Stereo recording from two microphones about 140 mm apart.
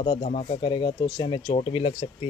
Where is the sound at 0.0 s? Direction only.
45° left (ahead or behind).